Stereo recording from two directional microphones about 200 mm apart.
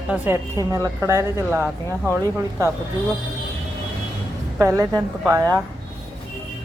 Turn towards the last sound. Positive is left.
turn(degrees=-15)  # may be behind; listen again after turning